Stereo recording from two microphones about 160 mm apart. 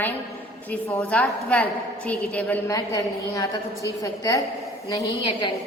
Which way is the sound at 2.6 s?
20° left (ahead or behind).